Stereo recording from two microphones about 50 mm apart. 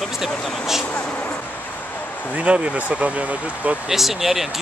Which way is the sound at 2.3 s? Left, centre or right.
Right.